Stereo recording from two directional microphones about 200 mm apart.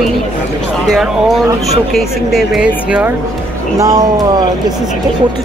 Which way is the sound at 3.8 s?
15° right (ahead or behind).